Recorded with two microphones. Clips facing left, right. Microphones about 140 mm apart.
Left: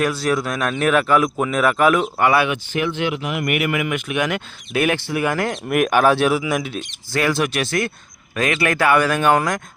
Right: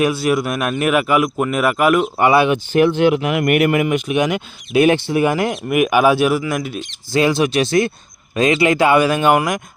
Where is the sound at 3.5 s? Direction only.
40° right (ahead or behind).